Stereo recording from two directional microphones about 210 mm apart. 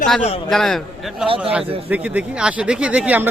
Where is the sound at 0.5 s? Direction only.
Centre (ahead or behind).